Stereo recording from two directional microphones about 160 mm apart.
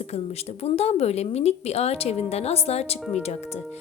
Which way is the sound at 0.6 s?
40° left (ahead or behind).